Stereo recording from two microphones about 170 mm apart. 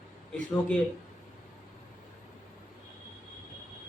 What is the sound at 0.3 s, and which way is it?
Speech, 10° left (ahead or behind).